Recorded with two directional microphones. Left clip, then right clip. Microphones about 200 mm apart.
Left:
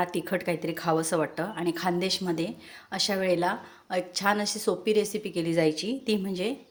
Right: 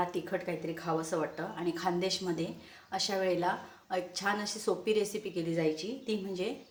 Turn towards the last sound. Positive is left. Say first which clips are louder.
# left 6 dB
turn(degrees=35)  # may be behind; listen again after turning